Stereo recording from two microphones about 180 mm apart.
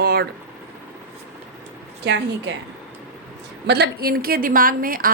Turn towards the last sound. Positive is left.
turn(degrees=-50)  # may be behind; listen again after turning